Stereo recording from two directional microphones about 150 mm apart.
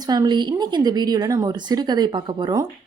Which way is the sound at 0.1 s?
30° right (ahead or behind).